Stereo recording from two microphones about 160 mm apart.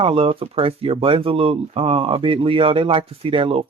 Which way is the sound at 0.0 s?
35° right (ahead or behind).